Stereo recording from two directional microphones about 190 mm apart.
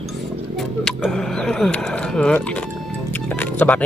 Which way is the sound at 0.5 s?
Centre (ahead or behind).